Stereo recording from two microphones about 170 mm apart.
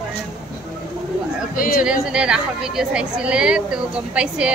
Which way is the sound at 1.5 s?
55° left (ahead or behind).